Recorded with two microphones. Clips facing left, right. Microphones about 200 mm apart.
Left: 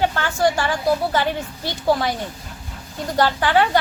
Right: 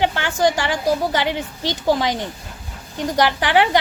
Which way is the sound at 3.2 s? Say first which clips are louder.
Even; 15° right (ahead or behind).